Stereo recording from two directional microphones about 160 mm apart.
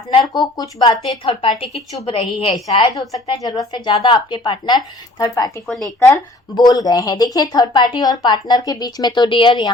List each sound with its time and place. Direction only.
0.1 s a woman's voice: 30° left (ahead or behind)
5.6 s speech: 5° left (ahead or behind)
6.5 s a woman's voice: 25° left (ahead or behind)